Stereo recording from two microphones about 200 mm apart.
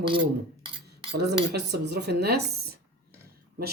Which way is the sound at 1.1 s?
55° right (ahead or behind).